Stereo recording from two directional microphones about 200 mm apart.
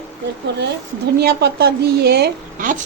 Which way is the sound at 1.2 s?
50° right (ahead or behind).